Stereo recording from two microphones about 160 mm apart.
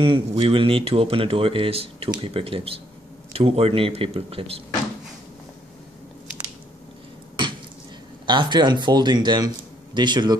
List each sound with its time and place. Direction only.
0.0 s speech: 35° right (ahead or behind)
8.3 s speech: 30° right (ahead or behind)